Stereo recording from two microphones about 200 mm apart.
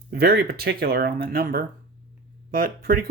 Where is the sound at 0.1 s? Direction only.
55° right (ahead or behind).